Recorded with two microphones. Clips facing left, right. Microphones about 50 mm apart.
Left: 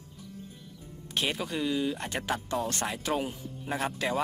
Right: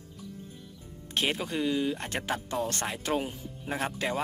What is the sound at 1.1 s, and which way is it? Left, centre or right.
Speech, right.